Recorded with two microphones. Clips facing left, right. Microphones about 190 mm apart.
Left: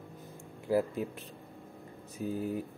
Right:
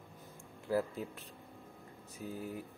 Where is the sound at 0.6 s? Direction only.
15° left (ahead or behind).